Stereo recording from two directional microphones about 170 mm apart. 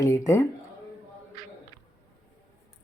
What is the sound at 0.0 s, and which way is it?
Speech, 20° left (ahead or behind).